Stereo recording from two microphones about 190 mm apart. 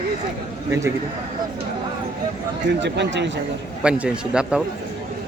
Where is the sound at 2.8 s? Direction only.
65° right (ahead or behind).